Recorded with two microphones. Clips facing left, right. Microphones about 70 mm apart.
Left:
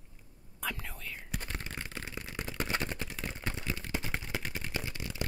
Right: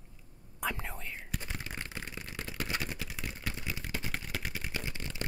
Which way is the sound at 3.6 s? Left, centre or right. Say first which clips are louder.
Left 2 dB; centre.